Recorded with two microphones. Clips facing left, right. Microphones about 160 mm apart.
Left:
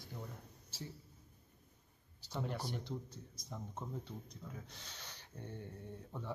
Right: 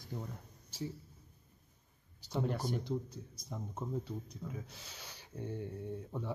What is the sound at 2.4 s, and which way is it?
Speech, 45° right (ahead or behind).